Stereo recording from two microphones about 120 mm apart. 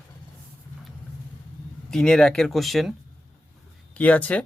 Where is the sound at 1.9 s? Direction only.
5° left (ahead or behind).